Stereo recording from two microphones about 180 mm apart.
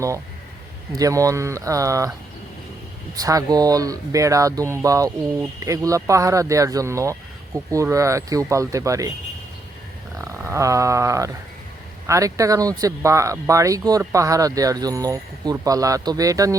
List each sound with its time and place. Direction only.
0.9 s speech: 20° right (ahead or behind)
3.2 s speech: 20° right (ahead or behind)
10.2 s roaring cats: 15° right (ahead or behind)
12.0 s speech: 15° right (ahead or behind)